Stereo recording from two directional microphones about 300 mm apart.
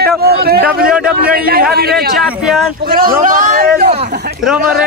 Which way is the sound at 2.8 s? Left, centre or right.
Right.